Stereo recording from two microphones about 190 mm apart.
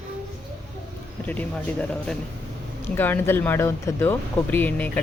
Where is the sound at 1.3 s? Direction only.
5° left (ahead or behind).